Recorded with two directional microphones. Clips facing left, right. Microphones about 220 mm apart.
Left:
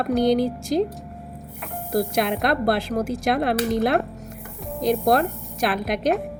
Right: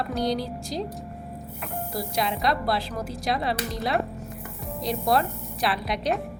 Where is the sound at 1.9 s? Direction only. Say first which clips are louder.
Left 8 dB; 55° left (ahead or behind).